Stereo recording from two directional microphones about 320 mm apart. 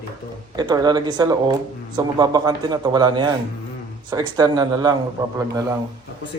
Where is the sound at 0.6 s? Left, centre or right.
Centre.